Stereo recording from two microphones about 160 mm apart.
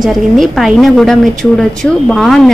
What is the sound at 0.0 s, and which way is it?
A woman's voice, centre (ahead or behind).